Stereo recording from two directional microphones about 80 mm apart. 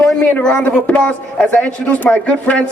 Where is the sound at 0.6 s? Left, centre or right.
Centre.